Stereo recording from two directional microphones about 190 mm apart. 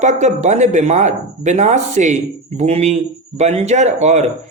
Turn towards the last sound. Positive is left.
turn(degrees=-35)  # may be behind; listen again after turning